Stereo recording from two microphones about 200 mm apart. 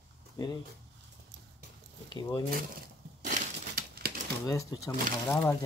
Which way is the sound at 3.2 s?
45° right (ahead or behind).